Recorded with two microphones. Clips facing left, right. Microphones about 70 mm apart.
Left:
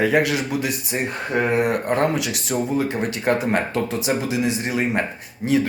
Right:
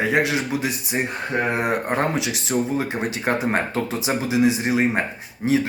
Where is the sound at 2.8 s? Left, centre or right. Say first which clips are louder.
Left 2 dB; right.